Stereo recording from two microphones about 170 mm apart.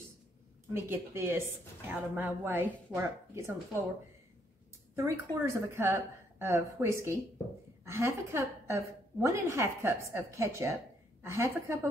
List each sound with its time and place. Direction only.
0.7 s a woman's voice: 15° right (ahead or behind)
4.9 s a woman's voice: 15° right (ahead or behind)